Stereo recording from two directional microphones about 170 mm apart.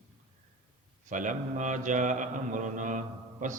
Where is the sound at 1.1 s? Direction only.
50° right (ahead or behind).